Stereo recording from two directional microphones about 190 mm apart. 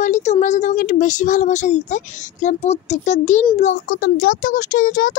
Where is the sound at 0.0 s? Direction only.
40° left (ahead or behind).